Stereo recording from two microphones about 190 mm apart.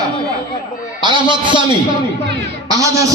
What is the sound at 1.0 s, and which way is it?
Speech, 25° right (ahead or behind).